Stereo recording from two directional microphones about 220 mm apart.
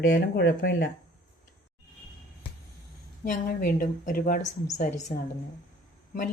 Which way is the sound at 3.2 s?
40° left (ahead or behind).